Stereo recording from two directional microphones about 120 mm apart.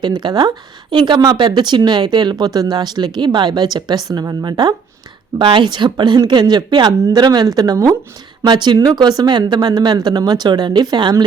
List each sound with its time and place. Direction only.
0.0 s speech: 35° right (ahead or behind)